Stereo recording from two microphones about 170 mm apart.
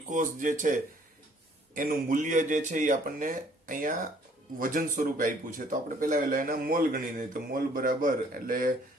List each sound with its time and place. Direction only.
0.1 s speech: 50° right (ahead or behind)